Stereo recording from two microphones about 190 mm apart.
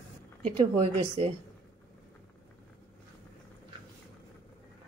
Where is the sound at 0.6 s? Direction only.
30° right (ahead or behind).